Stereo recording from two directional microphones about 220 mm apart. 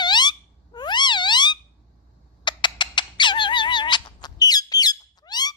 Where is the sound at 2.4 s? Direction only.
20° left (ahead or behind).